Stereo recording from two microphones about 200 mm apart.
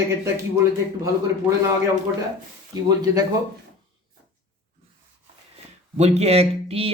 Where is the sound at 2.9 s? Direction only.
20° right (ahead or behind).